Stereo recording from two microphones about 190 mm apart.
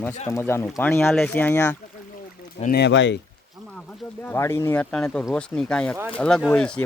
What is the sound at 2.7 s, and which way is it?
Speech, 65° left (ahead or behind).